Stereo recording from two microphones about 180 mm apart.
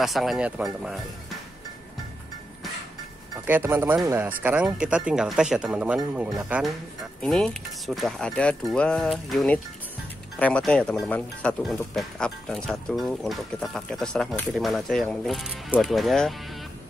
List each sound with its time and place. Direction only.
0.0 s speech: centre (ahead or behind)
3.4 s speech: 10° right (ahead or behind)